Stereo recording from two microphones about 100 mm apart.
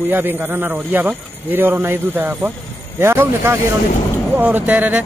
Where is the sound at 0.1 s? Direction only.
20° right (ahead or behind).